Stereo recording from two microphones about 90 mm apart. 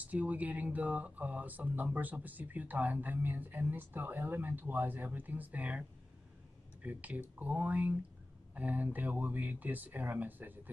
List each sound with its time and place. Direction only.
0.0 s speech: 15° right (ahead or behind)